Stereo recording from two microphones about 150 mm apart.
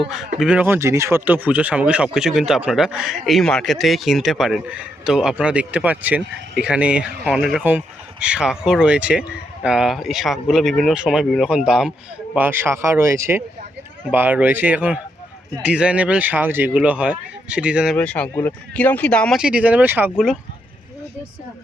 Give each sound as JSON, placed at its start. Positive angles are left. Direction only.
{"t": 0.3, "sound": "speech", "side_deg": -5}
{"t": 17.9, "sound": "speech", "side_deg": 10}
{"t": 19.4, "sound": "speech", "side_deg": -5}